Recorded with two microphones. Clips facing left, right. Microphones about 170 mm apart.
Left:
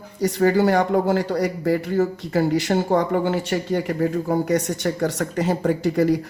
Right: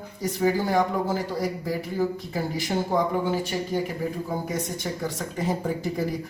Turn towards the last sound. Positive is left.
turn(degrees=75)  # may be behind; listen again after turning